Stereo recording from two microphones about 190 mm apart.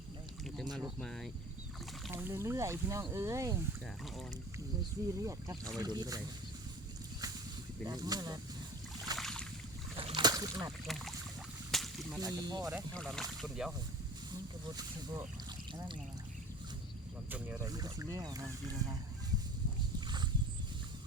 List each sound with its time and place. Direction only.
0.6 s a sound: 20° right (ahead or behind)
0.9 s speech: 5° left (ahead or behind)
2.1 s speech: 15° right (ahead or behind)
4.8 s speech: 15° right (ahead or behind)
7.9 s speech: 20° right (ahead or behind)
9.1 s boat: 5° left (ahead or behind)
10.2 s boat: 20° right (ahead or behind)
10.8 s speech: centre (ahead or behind)
11.7 s whip: centre (ahead or behind)
12.2 s speech: 20° right (ahead or behind)
12.9 s speech: 5° left (ahead or behind)
17.2 s speech: 10° right (ahead or behind)
17.7 s speech: 20° right (ahead or behind)